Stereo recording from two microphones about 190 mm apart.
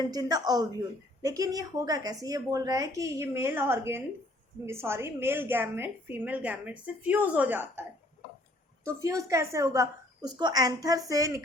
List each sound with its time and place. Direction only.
0.0 s a woman's voice: 20° right (ahead or behind)